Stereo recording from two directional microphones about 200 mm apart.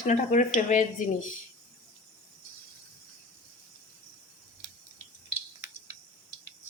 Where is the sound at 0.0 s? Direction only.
40° left (ahead or behind).